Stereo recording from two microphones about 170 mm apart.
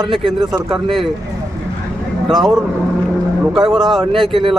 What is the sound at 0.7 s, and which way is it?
Speech, centre (ahead or behind).